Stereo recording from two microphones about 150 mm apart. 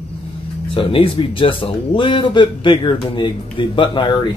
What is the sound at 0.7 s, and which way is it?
Speech, 35° left (ahead or behind).